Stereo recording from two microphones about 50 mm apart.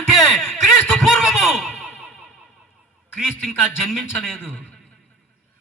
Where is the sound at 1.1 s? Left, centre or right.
Centre.